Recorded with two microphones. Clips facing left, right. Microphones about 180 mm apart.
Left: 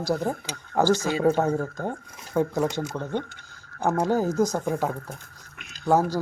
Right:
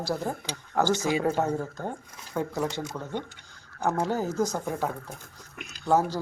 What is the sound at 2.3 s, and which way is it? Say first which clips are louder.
Speech: left 5 dB; 15° left (ahead or behind).